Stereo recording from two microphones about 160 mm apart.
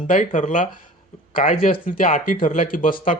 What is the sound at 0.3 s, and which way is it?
Speech, 50° left (ahead or behind).